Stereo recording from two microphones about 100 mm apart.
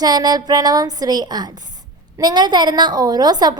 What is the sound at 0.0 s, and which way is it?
A woman's voice, 45° right (ahead or behind).